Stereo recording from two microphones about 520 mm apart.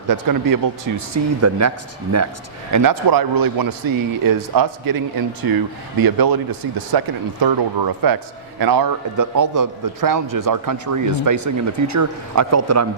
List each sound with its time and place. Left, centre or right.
0.1 s a man's voice: right